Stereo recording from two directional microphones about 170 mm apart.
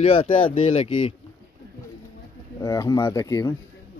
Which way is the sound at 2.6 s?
20° left (ahead or behind).